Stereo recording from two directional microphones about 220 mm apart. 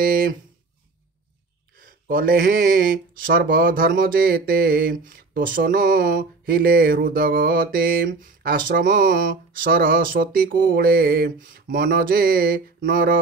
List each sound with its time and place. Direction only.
0.0 s speech: 40° right (ahead or behind)
1.8 s speech: 40° right (ahead or behind)